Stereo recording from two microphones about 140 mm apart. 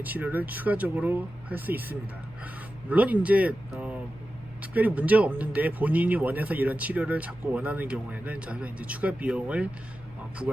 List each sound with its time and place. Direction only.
0.0 s speech: 10° right (ahead or behind)
4.6 s speech: 10° right (ahead or behind)